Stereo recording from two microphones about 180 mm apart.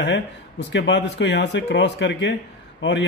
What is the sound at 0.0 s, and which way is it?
A man's voice, 80° left.